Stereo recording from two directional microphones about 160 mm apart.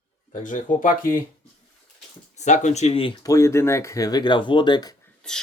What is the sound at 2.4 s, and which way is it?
Speech, 50° left (ahead or behind).